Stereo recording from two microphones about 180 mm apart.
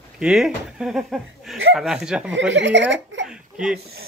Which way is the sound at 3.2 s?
5° right (ahead or behind).